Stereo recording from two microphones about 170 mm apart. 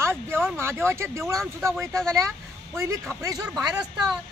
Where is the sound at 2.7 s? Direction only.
15° right (ahead or behind).